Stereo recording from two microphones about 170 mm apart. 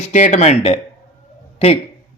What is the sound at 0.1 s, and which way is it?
A man's voice, 45° left (ahead or behind).